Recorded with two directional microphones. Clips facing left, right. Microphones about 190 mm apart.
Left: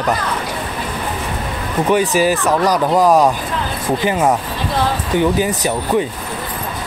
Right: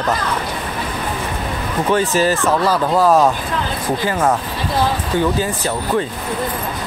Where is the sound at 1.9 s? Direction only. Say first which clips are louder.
Left 2 dB; 15° left (ahead or behind).